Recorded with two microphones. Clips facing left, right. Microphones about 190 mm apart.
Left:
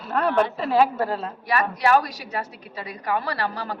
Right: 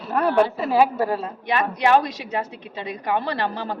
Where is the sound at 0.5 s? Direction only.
10° right (ahead or behind).